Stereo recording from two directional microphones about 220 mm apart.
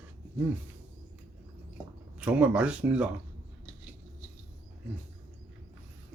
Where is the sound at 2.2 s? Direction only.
5° right (ahead or behind).